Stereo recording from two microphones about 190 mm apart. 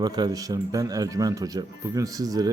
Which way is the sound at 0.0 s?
20° right (ahead or behind).